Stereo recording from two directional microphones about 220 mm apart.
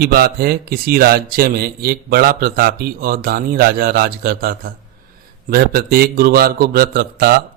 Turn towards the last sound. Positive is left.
turn(degrees=-45)  # may be behind; listen again after turning